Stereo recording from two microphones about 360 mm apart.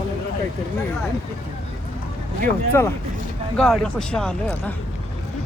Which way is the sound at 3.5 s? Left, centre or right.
Centre.